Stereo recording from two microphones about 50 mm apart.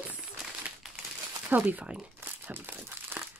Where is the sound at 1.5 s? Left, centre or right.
Right.